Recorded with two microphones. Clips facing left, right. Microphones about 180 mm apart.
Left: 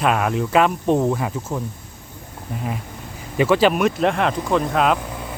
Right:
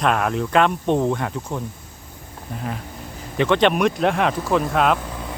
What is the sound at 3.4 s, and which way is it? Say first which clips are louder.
Speech: left 1 dB; 5° left (ahead or behind).